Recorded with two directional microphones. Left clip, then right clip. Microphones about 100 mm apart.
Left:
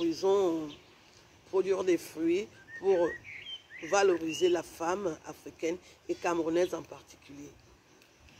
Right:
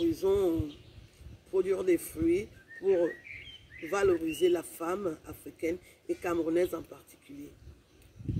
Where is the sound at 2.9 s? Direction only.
20° right (ahead or behind).